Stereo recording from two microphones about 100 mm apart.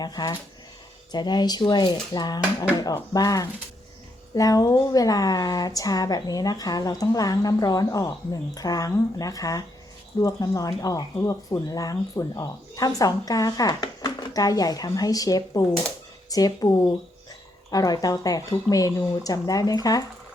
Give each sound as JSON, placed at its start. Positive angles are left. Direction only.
{"t": 0.0, "sound": "speech", "side_deg": 40}